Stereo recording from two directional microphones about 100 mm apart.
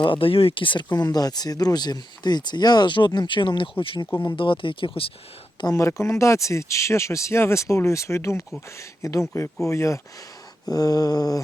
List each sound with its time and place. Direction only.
0.0 s speech: 60° left (ahead or behind)
5.5 s speech: 40° left (ahead or behind)
8.8 s a sound: 30° left (ahead or behind)